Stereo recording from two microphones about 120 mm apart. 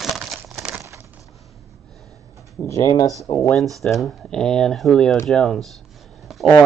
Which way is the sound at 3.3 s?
55° left (ahead or behind).